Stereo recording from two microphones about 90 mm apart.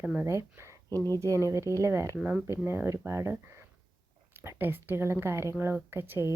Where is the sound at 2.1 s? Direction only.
10° right (ahead or behind).